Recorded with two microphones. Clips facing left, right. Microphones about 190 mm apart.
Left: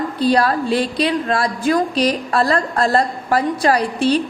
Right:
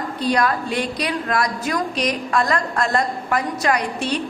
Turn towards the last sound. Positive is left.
turn(degrees=30)  # may be behind; listen again after turning